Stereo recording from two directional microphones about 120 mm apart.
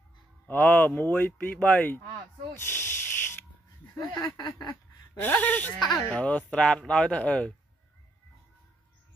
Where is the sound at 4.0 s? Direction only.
30° left (ahead or behind).